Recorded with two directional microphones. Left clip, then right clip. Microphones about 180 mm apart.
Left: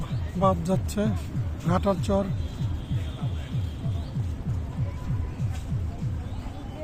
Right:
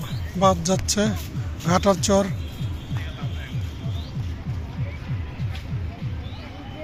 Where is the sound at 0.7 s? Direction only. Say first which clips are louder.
Right 5 dB; 5° right (ahead or behind).